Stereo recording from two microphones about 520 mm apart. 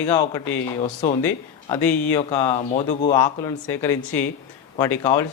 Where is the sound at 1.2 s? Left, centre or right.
Centre.